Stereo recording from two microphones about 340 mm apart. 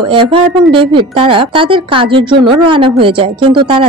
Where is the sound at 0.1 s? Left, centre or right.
Centre.